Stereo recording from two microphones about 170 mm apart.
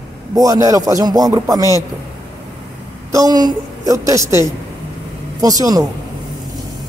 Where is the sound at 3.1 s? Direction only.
20° right (ahead or behind).